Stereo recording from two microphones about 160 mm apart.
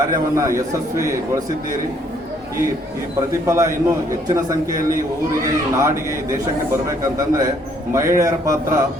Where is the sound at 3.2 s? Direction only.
20° right (ahead or behind).